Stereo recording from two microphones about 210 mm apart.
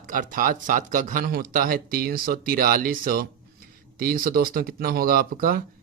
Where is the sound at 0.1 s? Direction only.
40° right (ahead or behind).